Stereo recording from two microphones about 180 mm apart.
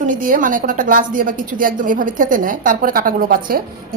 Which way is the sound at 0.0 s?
50° right (ahead or behind).